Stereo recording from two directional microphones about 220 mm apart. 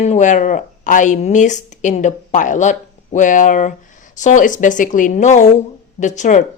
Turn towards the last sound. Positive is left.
turn(degrees=35)  # may be behind; listen again after turning